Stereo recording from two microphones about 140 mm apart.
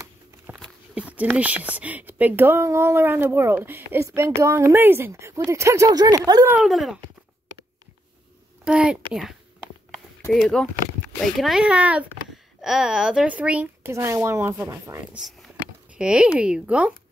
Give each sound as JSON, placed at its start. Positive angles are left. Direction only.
{"t": 0.5, "sound": "a sound", "side_deg": -15}
{"t": 1.3, "sound": "speech", "side_deg": -10}
{"t": 6.6, "sound": "speech", "side_deg": -5}
{"t": 8.6, "sound": "a woman's voice", "side_deg": -5}
{"t": 10.3, "sound": "speech", "side_deg": 5}
{"t": 15.1, "sound": "speech", "side_deg": 0}